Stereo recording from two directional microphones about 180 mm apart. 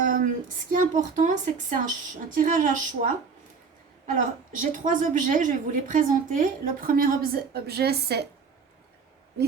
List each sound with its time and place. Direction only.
0.7 s a woman's voice: 45° right (ahead or behind); by 8.2 s 65° right (ahead or behind)